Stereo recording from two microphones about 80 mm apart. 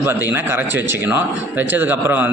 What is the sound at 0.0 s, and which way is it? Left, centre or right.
A man's voice, right.